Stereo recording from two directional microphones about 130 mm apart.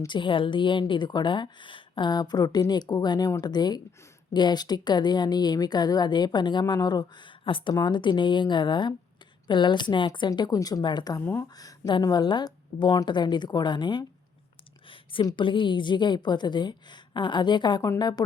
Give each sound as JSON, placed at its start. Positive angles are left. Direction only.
{"t": 0.1, "sound": "a woman's voice", "side_deg": 40}
{"t": 14.8, "sound": "a sound", "side_deg": 40}
{"t": 15.3, "sound": "a woman's voice", "side_deg": 40}